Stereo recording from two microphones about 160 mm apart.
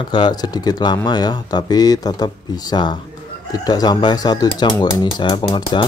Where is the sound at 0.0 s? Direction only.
25° left (ahead or behind).